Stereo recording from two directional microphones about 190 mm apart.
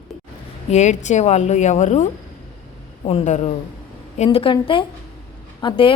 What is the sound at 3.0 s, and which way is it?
A woman's voice, 35° left (ahead or behind).